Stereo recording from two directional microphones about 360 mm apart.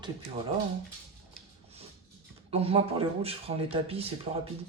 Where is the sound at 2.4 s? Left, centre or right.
Centre.